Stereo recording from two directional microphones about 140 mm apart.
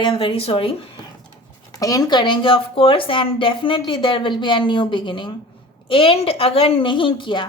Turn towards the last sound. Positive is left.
turn(degrees=35)  # may be behind; listen again after turning